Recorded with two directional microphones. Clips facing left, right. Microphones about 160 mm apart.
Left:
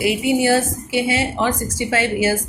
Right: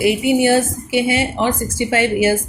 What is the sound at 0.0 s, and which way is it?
A woman's voice, 25° right (ahead or behind).